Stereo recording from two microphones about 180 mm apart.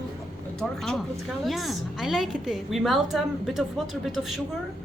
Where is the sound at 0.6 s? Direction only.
Centre (ahead or behind).